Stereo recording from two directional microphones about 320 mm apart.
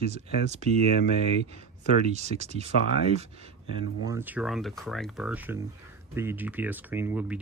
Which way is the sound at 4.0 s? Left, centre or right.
Centre.